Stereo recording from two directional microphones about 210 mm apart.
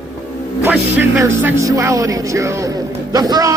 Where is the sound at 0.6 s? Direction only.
10° right (ahead or behind).